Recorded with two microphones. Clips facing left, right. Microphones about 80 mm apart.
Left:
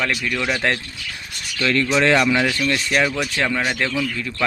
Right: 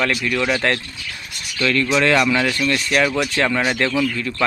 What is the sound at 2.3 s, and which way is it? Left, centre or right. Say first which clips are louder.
Speech: even; centre.